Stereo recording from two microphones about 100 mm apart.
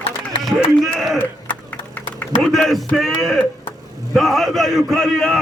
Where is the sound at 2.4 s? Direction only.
5° left (ahead or behind).